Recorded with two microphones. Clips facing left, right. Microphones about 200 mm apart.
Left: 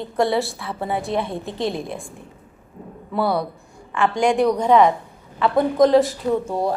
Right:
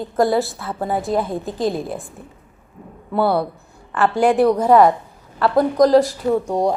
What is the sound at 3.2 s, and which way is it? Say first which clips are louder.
Speech: right 3 dB; 60° right (ahead or behind).